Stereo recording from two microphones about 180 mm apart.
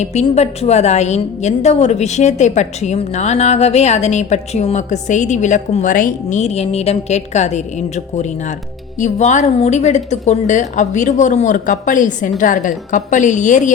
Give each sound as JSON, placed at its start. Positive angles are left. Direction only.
{"t": 0.0, "sound": "a woman's voice", "side_deg": 40}